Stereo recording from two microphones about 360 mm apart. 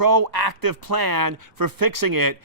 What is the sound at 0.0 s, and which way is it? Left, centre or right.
Speech, right.